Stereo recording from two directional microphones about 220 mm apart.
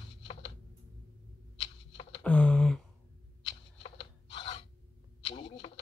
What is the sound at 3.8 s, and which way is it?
Rub, 25° left (ahead or behind).